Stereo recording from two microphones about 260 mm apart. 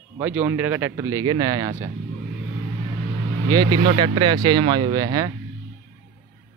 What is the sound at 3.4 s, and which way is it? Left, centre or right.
Speech, centre.